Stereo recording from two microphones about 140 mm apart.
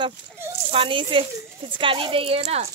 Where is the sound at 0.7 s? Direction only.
40° right (ahead or behind).